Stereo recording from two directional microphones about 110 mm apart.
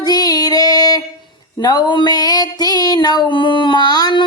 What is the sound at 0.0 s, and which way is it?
Female singing, 35° left (ahead or behind).